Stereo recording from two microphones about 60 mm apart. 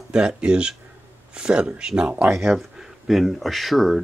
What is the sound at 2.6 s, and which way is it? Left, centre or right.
Speech, centre.